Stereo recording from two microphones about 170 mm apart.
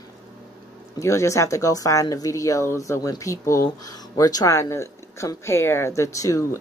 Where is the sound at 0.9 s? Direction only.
15° left (ahead or behind).